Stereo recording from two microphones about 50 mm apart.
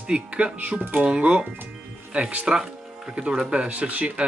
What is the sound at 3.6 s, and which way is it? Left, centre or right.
Speech, right.